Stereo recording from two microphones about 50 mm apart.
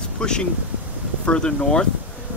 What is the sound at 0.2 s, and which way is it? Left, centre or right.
Speech, centre.